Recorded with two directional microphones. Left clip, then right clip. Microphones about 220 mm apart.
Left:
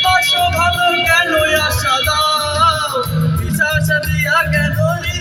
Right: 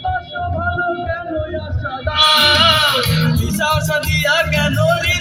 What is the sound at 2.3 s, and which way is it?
Music, 15° left (ahead or behind).